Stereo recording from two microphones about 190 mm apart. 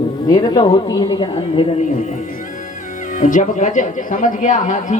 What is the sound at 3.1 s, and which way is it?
Speech, 40° left (ahead or behind).